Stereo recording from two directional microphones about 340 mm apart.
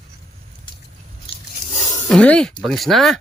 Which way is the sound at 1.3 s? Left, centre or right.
Centre.